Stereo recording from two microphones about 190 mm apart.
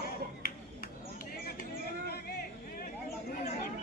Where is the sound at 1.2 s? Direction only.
50° left (ahead or behind).